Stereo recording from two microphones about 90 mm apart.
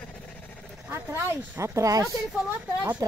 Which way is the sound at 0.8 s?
25° right (ahead or behind).